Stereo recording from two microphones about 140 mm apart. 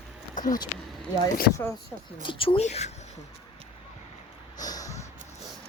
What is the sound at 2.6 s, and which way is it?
Speech, 50° left (ahead or behind).